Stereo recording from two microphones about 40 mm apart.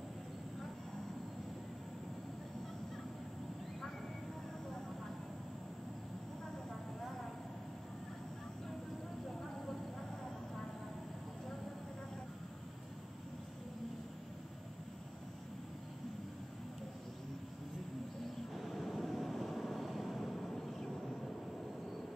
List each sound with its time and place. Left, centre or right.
18.5 s vehicle: centre